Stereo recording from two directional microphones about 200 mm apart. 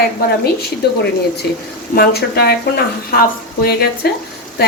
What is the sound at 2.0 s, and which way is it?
Speech, 50° left (ahead or behind).